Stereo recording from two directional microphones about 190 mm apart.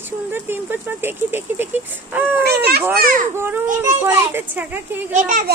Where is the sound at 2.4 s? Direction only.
55° right (ahead or behind).